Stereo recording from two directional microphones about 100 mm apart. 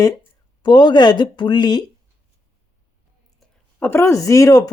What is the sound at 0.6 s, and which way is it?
Speech, 50° left (ahead or behind).